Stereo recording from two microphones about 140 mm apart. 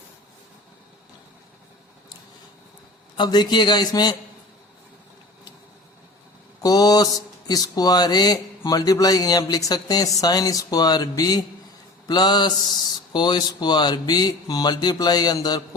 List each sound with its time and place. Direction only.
3.2 s a man's voice: 30° left (ahead or behind)
6.6 s speech: 25° left (ahead or behind)